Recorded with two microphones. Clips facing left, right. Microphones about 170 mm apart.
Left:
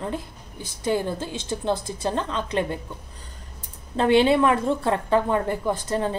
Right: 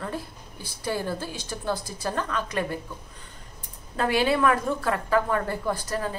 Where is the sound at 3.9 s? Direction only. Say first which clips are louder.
Left 6 dB; 25° left (ahead or behind).